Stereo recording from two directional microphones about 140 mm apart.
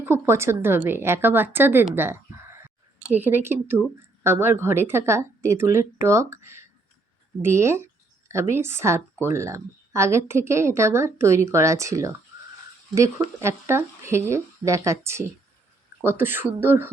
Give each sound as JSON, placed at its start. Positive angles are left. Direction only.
{"t": 0.0, "sound": "a woman's voice", "side_deg": -20}